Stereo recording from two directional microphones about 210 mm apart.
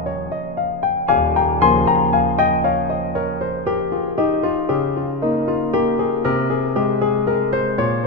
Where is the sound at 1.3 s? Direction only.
35° left (ahead or behind).